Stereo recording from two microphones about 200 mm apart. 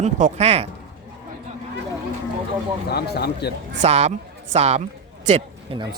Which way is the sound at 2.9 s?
55° left (ahead or behind).